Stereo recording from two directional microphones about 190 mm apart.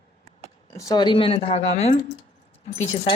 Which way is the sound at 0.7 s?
20° left (ahead or behind).